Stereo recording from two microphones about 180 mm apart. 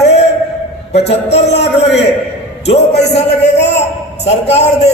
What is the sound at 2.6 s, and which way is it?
A man's voice, 35° left (ahead or behind).